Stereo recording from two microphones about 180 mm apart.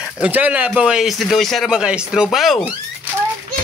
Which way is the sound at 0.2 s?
10° right (ahead or behind).